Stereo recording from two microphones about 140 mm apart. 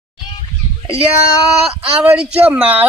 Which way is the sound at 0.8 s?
40° right (ahead or behind).